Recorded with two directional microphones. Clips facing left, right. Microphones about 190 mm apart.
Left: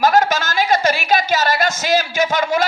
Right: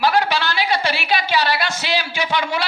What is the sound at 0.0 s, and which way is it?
A woman's voice, 45° left (ahead or behind).